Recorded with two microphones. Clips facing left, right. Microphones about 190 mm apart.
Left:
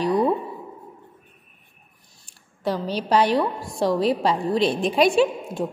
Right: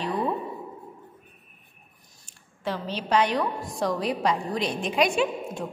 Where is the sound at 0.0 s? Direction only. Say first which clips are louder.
Left 7 dB; 40° left (ahead or behind).